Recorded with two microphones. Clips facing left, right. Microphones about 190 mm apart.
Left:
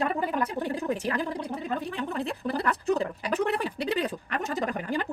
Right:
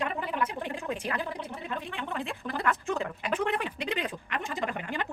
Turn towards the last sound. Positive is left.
turn(degrees=40)  # may be behind; listen again after turning